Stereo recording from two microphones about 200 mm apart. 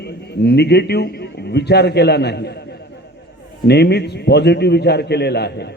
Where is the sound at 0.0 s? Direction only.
55° left (ahead or behind).